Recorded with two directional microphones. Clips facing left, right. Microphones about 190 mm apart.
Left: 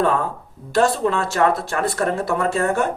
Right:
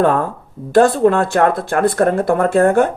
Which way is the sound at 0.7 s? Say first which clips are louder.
Right 7 dB; 55° right (ahead or behind).